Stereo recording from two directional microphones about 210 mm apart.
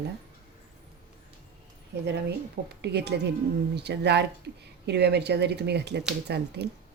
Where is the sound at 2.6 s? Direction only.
55° right (ahead or behind).